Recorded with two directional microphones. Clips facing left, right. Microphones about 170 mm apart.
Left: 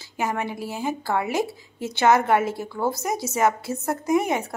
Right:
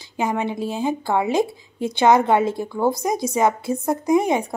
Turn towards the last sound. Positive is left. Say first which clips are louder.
# right 4 dB
turn(degrees=-15)  # may be behind; listen again after turning